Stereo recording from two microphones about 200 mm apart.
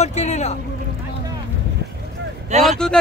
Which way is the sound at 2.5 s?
35° right (ahead or behind).